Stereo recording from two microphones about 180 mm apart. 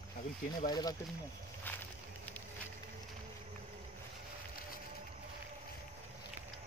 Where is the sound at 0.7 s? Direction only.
20° left (ahead or behind).